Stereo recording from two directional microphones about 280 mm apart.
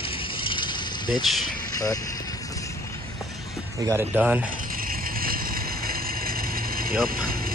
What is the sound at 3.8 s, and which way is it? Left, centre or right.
Speech, centre.